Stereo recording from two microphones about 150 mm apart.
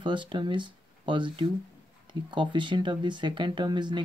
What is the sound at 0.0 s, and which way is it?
Speech, 35° right (ahead or behind).